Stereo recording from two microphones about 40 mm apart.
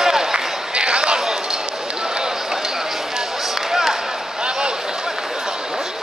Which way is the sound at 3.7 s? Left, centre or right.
Centre.